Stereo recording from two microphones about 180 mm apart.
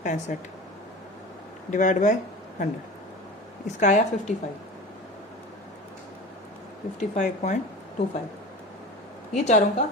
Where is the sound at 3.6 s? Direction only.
40° left (ahead or behind).